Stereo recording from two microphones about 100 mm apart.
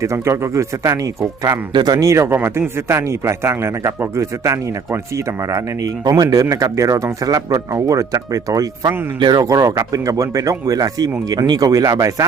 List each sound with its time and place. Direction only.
0.0 s speech: 30° right (ahead or behind)
1.7 s speech: 45° right (ahead or behind)